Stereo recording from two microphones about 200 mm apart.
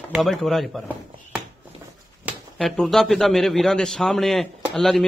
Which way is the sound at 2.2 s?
Centre (ahead or behind).